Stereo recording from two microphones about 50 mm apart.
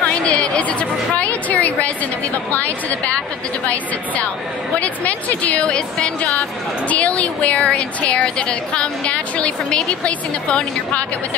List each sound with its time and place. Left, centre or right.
0.0 s a woman's voice: left
4.7 s a woman's voice: left